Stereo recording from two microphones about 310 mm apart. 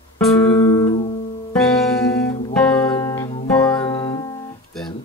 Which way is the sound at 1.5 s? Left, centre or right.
Centre.